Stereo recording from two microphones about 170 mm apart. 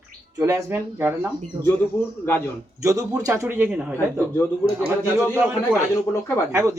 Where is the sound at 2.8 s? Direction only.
20° right (ahead or behind).